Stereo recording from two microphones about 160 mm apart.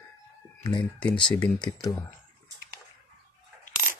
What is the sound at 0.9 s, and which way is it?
Speech, 5° left (ahead or behind).